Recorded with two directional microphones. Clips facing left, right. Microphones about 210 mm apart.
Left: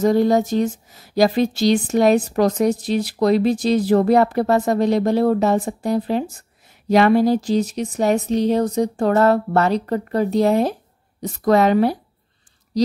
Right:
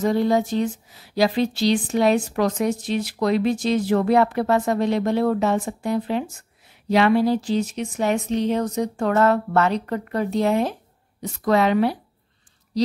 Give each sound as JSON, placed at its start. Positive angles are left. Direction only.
{"t": 0.0, "sound": "speech", "side_deg": 40}